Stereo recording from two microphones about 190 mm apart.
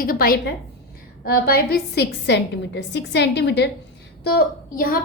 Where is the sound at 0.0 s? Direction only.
50° left (ahead or behind).